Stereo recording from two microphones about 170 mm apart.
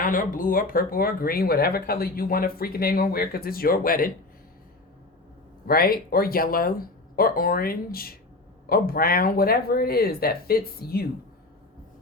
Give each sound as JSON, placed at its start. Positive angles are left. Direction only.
{"t": 0.0, "sound": "speech", "side_deg": 55}
{"t": 5.6, "sound": "speech", "side_deg": 60}